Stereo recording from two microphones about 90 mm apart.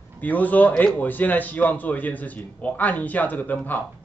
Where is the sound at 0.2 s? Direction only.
20° left (ahead or behind).